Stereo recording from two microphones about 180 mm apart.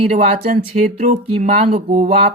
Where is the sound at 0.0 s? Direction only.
35° right (ahead or behind).